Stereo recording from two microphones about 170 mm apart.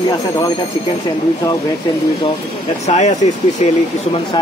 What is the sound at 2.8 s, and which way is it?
Speech, 45° left (ahead or behind).